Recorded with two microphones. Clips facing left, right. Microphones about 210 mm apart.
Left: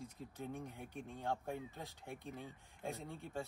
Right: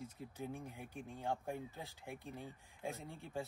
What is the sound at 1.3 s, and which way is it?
Speech, 15° right (ahead or behind).